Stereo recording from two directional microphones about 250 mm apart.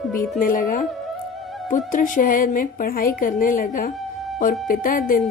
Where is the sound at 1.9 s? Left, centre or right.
Left.